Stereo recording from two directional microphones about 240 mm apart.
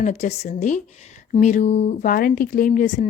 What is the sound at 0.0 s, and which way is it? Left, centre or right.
Speech, left.